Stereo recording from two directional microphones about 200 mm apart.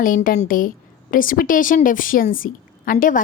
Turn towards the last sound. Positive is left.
turn(degrees=45)  # may be behind; listen again after turning